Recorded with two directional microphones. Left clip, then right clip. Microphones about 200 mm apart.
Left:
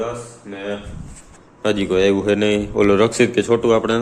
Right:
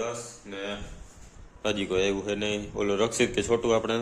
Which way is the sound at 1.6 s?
5° left (ahead or behind).